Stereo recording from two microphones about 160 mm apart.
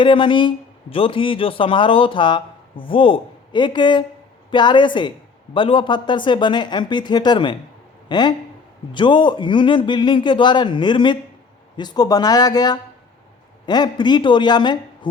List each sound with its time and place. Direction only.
0.0 s a man's voice: 30° left (ahead or behind)